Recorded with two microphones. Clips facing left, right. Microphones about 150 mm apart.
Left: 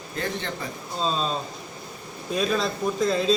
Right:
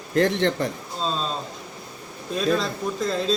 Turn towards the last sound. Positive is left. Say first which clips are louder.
# left 2 dB
turn(degrees=0)  # may be behind; listen again after turning